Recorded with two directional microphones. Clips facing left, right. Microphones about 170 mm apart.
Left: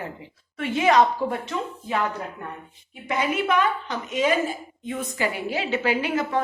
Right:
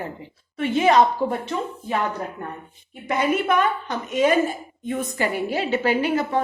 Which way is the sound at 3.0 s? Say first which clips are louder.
Right 3 dB; 50° right (ahead or behind).